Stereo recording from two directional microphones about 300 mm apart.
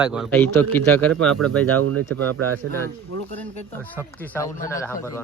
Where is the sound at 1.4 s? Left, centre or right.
Right.